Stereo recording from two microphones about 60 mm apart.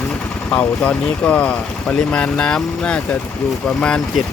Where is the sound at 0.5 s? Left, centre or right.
Left.